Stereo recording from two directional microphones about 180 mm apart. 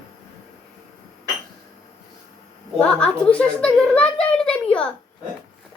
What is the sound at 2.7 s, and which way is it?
A woman's voice, 5° left (ahead or behind).